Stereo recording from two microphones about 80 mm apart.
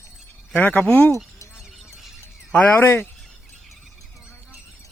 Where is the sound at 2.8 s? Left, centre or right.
Left.